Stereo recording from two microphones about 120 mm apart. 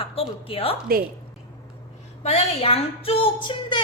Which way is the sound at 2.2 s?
60° left (ahead or behind).